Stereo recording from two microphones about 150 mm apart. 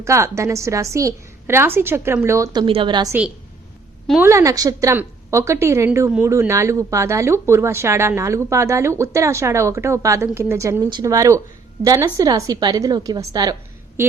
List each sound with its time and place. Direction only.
0.0 s a woman's voice: 20° right (ahead or behind)
4.2 s a woman's voice: 20° right (ahead or behind)